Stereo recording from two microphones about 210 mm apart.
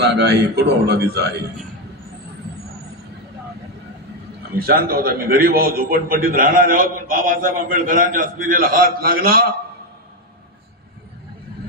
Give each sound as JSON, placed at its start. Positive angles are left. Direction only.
{"t": 0.0, "sound": "a man's voice", "side_deg": -50}
{"t": 4.6, "sound": "a man's voice", "side_deg": -45}